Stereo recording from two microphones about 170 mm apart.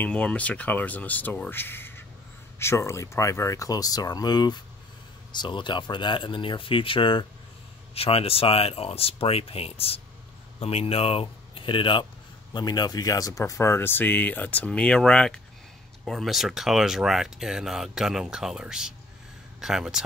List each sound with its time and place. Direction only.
0.0 s speech: 5° left (ahead or behind)